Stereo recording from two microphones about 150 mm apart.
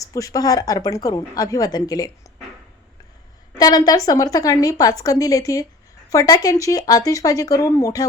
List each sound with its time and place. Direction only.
0.0 s a woman's voice: 25° left (ahead or behind)
3.6 s a woman's voice: 25° left (ahead or behind)